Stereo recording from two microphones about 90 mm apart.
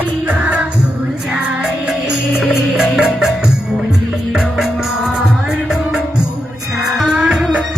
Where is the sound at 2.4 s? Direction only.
10° right (ahead or behind).